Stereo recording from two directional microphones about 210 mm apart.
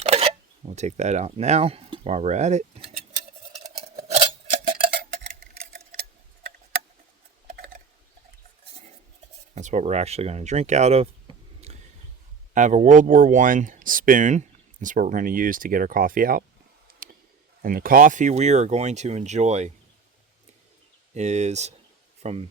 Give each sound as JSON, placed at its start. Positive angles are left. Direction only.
{"t": 0.0, "sound": "speech", "side_deg": -30}
{"t": 4.1, "sound": "scissors", "side_deg": -25}
{"t": 7.4, "sound": "typing", "side_deg": -45}
{"t": 9.6, "sound": "speech", "side_deg": -35}
{"t": 11.6, "sound": "a sound", "side_deg": -30}
{"t": 12.5, "sound": "speech", "side_deg": -35}
{"t": 17.0, "sound": "a sound", "side_deg": -45}
{"t": 17.6, "sound": "speech", "side_deg": -45}
{"t": 21.1, "sound": "speech", "side_deg": -35}